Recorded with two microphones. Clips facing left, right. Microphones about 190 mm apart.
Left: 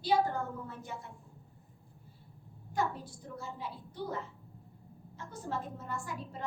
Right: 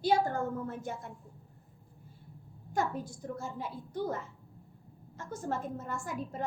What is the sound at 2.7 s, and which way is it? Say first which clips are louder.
A child's voice: right 2 dB; 45° right (ahead or behind).